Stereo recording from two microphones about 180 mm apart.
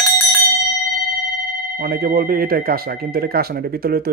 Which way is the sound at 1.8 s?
55° right (ahead or behind).